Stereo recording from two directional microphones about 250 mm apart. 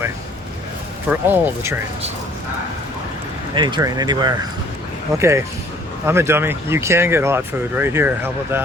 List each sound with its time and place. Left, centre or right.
1.1 s speech: centre
3.5 s speech: centre